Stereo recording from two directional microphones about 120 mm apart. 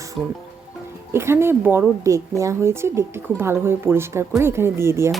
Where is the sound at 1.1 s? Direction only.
20° right (ahead or behind).